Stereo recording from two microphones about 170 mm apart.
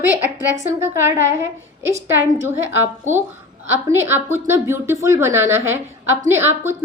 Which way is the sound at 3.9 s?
15° right (ahead or behind).